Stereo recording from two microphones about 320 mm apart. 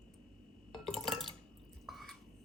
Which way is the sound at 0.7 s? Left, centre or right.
Centre.